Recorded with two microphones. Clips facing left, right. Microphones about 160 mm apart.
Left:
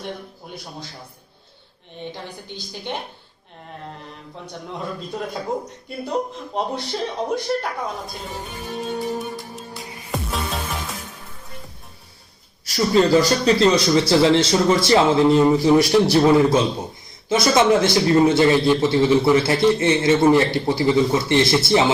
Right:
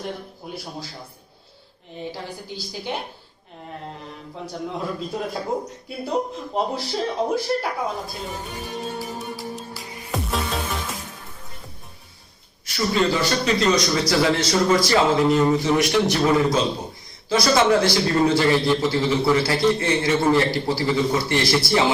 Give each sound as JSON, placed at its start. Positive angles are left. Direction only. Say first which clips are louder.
{"t": 2.0, "sound": "speech", "louder": "right 1 dB", "side_deg": -5}
{"t": 4.8, "sound": "speech", "louder": "left 1 dB", "side_deg": 0}
{"t": 8.8, "sound": "music", "louder": "left 8 dB", "side_deg": 0}
{"t": 12.6, "sound": "a man's voice", "louder": "left 4 dB", "side_deg": 40}
{"t": 17.2, "sound": "a man's voice", "louder": "left 2 dB", "side_deg": 20}